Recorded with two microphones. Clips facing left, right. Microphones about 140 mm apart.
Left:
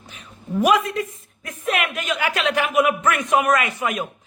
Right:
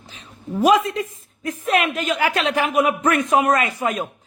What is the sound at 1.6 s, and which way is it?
A man's voice, 30° right (ahead or behind).